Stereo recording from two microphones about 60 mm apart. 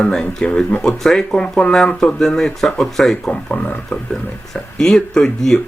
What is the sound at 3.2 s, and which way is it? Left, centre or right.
Speech, centre.